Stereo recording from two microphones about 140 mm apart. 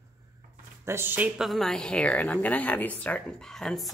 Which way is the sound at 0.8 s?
15° right (ahead or behind).